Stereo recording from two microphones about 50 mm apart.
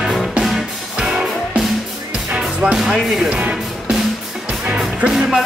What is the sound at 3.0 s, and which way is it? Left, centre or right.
Music, centre.